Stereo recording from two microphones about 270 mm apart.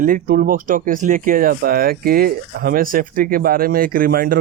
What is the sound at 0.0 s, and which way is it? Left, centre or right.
Speech, right.